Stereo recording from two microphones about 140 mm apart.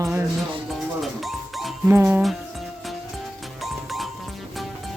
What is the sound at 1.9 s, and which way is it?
Speech, 15° right (ahead or behind).